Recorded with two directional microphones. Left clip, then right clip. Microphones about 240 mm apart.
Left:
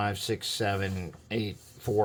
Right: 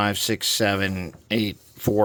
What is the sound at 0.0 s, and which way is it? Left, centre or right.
Speech, right.